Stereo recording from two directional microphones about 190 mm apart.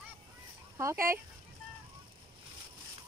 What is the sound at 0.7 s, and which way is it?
Speech, 15° right (ahead or behind).